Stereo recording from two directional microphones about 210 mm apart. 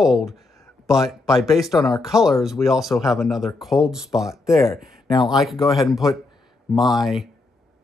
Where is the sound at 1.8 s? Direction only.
20° left (ahead or behind).